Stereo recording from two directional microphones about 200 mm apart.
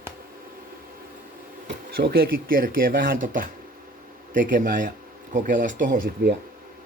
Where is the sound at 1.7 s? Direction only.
55° right (ahead or behind).